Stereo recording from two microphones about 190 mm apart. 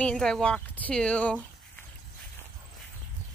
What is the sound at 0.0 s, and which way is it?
Speech, 5° left (ahead or behind).